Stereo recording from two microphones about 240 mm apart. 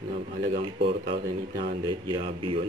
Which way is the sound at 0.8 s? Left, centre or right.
Centre.